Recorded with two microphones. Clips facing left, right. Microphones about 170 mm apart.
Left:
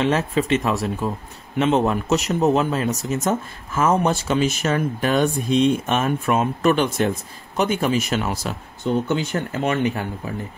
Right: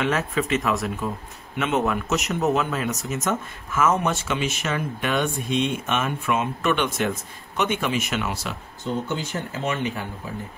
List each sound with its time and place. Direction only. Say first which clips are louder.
0.0 s speech: left 4 dB; 30° left (ahead or behind)
9.1 s speech: left 6 dB; 60° left (ahead or behind)